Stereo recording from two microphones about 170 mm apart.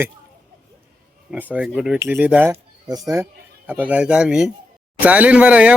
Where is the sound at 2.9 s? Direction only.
20° right (ahead or behind).